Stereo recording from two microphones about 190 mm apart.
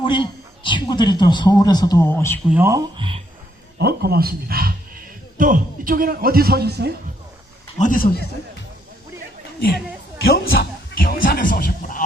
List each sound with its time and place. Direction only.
0.0 s speech: 25° left (ahead or behind); by 2.4 s 10° left (ahead or behind)
2.5 s speech: 15° right (ahead or behind)
3.8 s a man's voice: 55° right (ahead or behind)
7.8 s a man's voice: 45° left (ahead or behind)
10.2 s a sound: 55° left (ahead or behind)